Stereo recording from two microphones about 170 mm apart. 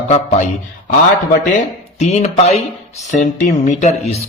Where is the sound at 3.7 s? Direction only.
40° left (ahead or behind).